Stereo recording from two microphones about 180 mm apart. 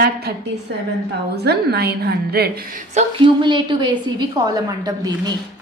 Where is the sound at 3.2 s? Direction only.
25° right (ahead or behind).